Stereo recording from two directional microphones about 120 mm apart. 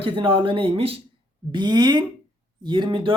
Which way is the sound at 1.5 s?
40° right (ahead or behind).